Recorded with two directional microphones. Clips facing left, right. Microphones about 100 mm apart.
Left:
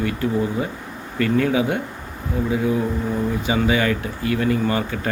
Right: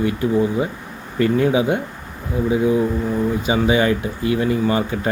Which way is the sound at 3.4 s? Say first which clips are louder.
Right 3 dB; 20° right (ahead or behind).